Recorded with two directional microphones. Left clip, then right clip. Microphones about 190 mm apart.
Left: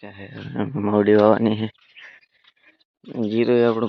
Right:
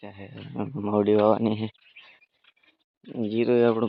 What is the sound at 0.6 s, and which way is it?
Speech, 15° left (ahead or behind).